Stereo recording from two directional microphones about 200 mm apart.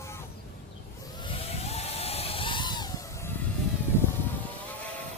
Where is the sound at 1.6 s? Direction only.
30° left (ahead or behind).